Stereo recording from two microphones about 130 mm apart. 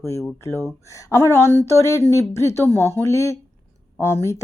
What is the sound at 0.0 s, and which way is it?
Speech, 25° left (ahead or behind).